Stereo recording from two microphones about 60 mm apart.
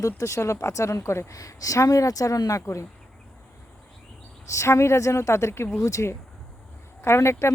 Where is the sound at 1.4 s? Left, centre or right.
Left.